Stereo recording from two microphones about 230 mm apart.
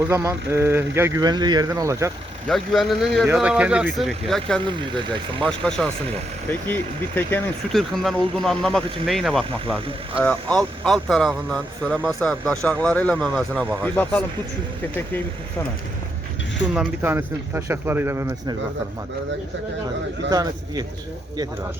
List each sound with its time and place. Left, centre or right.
0.0 s speech: centre
2.5 s speech: centre
7.3 s speech: centre
16.7 s speech: centre
20.3 s speech: centre